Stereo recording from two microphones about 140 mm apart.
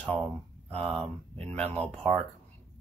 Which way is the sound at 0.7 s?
45° right (ahead or behind).